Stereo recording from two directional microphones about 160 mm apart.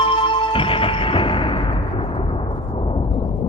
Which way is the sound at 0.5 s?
35° left (ahead or behind).